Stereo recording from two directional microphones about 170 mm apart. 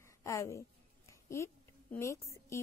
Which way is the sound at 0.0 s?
20° left (ahead or behind).